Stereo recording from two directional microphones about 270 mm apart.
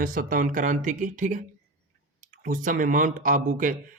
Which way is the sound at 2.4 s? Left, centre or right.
Right.